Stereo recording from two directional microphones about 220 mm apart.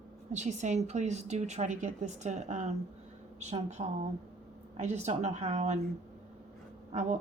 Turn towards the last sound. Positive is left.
turn(degrees=-30)  # may be behind; listen again after turning